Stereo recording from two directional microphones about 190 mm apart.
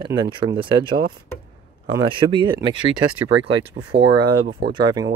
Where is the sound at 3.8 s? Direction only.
65° right (ahead or behind).